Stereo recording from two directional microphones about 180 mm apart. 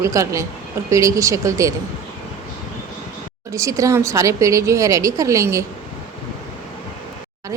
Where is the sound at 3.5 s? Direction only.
15° right (ahead or behind).